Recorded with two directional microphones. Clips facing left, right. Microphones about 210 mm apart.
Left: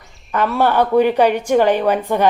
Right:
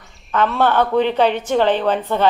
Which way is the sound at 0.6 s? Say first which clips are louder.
Left 3 dB; 15° left (ahead or behind).